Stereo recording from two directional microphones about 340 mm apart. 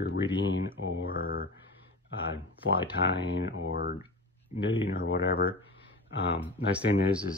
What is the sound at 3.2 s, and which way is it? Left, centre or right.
Speech, left.